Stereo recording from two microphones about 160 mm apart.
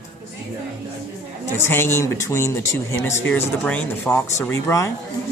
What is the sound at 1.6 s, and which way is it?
Speech, 15° left (ahead or behind).